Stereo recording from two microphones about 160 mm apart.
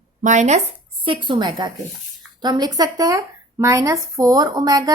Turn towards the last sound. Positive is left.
turn(degrees=-25)  # may be behind; listen again after turning